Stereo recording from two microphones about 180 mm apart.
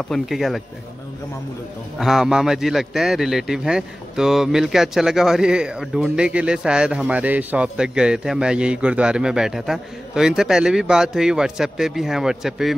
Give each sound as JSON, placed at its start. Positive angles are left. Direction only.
{"t": 0.1, "sound": "a man's voice", "side_deg": 0}
{"t": 2.0, "sound": "a man's voice", "side_deg": 0}